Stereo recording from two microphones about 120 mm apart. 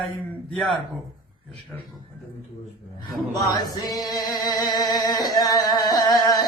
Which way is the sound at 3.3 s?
35° left (ahead or behind).